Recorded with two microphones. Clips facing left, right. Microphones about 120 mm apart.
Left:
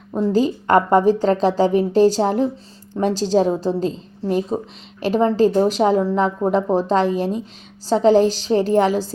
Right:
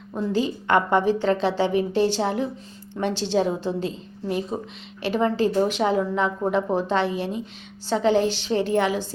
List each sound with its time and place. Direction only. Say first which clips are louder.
0.1 s a woman's voice: left 6 dB; 35° left (ahead or behind)